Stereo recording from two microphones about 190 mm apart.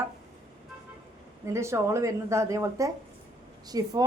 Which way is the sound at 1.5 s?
15° right (ahead or behind).